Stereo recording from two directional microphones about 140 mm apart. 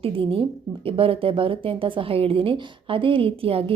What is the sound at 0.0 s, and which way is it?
A woman's voice, 40° right (ahead or behind).